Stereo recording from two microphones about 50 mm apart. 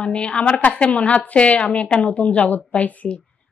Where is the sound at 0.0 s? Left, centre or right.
Left.